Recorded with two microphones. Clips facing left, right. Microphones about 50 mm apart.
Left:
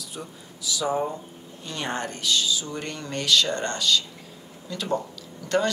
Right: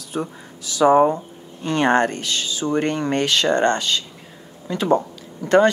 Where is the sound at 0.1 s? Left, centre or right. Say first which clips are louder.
Right 11 dB; right.